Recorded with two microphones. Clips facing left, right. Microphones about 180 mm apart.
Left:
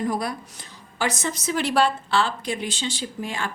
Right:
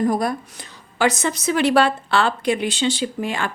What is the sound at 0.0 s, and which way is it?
Speech, 45° right (ahead or behind).